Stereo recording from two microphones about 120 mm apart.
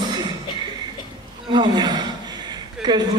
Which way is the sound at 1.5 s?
40° right (ahead or behind).